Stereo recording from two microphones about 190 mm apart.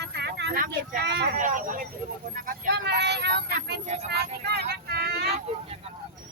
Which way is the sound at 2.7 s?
65° right (ahead or behind).